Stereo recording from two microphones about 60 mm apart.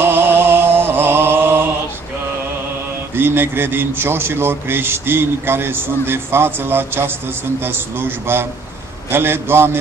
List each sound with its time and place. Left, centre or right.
0.0 s chant: right
3.2 s a man's voice: right